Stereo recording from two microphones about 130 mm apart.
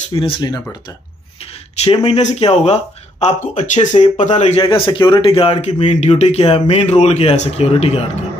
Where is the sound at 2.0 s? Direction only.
55° left (ahead or behind).